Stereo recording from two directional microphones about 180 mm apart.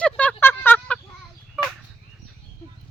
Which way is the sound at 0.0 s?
10° left (ahead or behind).